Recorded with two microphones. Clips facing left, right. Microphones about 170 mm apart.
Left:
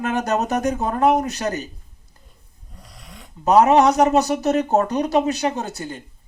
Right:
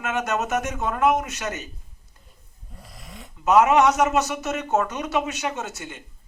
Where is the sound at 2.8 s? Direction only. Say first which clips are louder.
Right 1 dB; 5° right (ahead or behind).